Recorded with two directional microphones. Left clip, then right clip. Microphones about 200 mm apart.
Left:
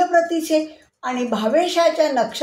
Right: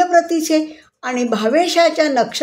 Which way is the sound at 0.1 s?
60° right (ahead or behind).